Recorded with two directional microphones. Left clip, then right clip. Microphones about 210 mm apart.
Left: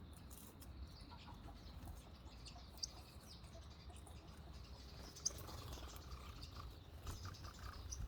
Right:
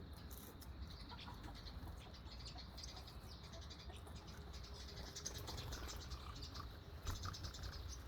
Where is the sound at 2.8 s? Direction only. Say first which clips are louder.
Left 9 dB; 25° left (ahead or behind).